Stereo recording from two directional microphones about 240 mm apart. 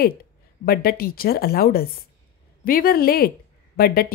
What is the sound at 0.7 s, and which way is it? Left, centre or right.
A woman's voice, left.